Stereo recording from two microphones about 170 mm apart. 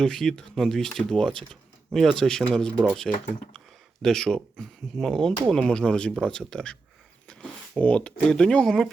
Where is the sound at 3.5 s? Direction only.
Centre (ahead or behind).